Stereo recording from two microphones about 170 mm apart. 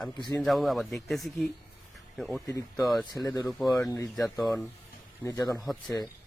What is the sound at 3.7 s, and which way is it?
Speech, 20° left (ahead or behind).